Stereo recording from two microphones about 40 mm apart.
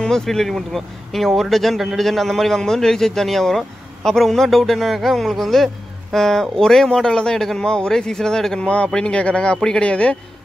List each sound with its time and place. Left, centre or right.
0.2 s speech: centre
8.5 s a man's voice: left